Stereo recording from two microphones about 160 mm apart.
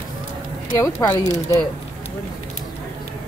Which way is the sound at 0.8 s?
15° left (ahead or behind).